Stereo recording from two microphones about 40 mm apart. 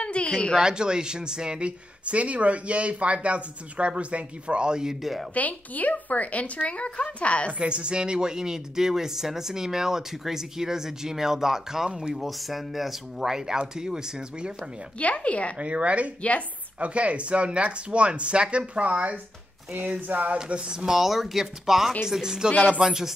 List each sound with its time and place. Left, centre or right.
0.0 s a sound: left
0.6 s speech: centre
2.0 s speech: right
5.3 s speech: left
7.5 s speech: right; by 12.9 s centre
13.2 s speech: centre
15.1 s speech: left
15.6 s speech: right
16.2 s speech: left
16.8 s speech: right
20.4 s speech: right
21.0 s speech: centre